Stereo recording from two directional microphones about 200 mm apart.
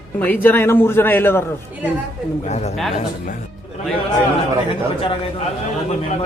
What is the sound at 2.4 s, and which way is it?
Speech, 35° left (ahead or behind).